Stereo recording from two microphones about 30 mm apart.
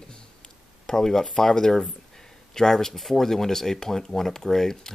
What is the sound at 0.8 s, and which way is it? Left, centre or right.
Speech, centre.